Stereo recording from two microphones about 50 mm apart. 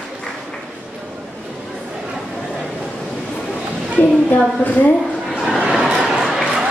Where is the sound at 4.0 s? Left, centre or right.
Left.